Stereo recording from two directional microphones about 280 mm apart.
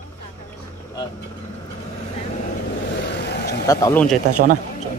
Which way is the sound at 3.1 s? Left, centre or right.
Left.